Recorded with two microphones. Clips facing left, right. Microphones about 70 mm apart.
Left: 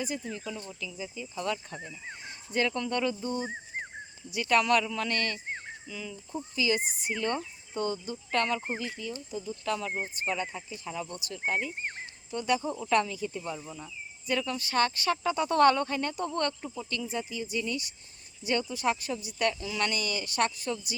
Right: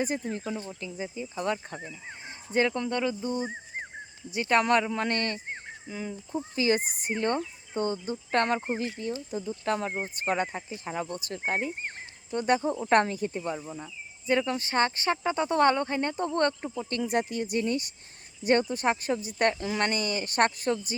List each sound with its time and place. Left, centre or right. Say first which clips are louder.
0.3 s speech: right 4 dB; right; by 3.5 s centre
4.3 s speech: right 1 dB; right
17.0 s speech: right 9 dB; right
17.7 s speech: right 5 dB; right